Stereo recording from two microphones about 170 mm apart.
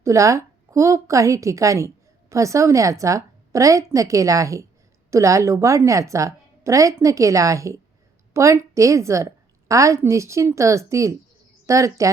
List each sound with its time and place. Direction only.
0.0 s a woman's voice: 20° right (ahead or behind)